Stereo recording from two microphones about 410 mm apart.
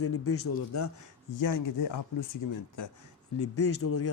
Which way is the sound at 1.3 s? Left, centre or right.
Left.